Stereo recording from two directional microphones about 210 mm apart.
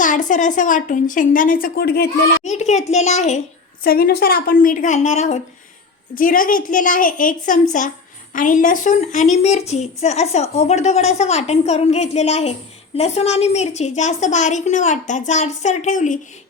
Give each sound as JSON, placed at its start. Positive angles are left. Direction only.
{"t": 0.0, "sound": "a woman's voice", "side_deg": 35}
{"t": 2.4, "sound": "a woman's voice", "side_deg": 35}
{"t": 3.8, "sound": "a woman's voice", "side_deg": 45}